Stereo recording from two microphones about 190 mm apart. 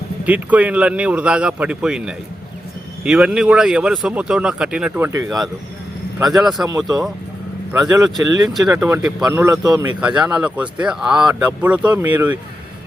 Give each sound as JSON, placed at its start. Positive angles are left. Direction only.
{"t": 0.3, "sound": "speech", "side_deg": -10}
{"t": 8.1, "sound": "speech", "side_deg": -5}
{"t": 10.0, "sound": "speech", "side_deg": -5}